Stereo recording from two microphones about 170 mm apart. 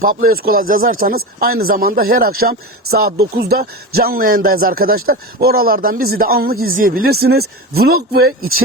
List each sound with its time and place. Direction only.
0.0 s speech: 60° right (ahead or behind)